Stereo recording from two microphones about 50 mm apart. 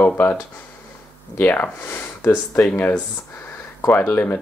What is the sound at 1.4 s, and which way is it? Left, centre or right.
Speech, left.